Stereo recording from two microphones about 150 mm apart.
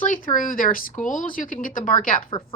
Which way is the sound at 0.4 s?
65° left (ahead or behind).